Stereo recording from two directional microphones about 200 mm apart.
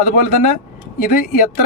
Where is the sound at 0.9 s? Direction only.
45° left (ahead or behind).